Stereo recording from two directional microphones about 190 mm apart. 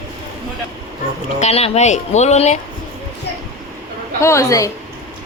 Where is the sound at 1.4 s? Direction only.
35° left (ahead or behind).